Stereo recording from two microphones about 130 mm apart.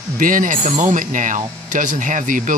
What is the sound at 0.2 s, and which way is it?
Speech, 90° right.